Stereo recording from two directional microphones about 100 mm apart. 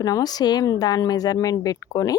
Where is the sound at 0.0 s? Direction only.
40° left (ahead or behind).